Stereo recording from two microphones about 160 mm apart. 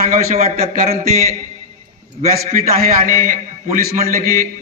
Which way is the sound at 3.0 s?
60° right (ahead or behind).